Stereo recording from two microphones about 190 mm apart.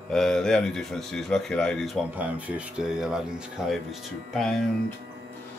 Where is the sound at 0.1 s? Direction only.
5° left (ahead or behind).